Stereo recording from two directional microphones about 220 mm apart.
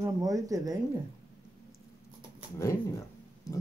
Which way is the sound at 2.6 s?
15° left (ahead or behind).